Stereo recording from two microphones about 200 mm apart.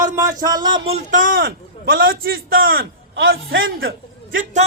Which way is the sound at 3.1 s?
75° right (ahead or behind).